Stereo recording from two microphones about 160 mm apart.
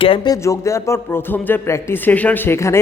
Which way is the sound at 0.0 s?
30° left (ahead or behind).